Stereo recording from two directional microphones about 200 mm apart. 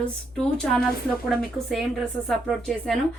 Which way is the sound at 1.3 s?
Centre (ahead or behind).